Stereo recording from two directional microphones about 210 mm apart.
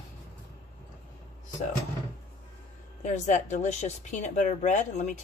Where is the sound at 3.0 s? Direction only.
35° left (ahead or behind).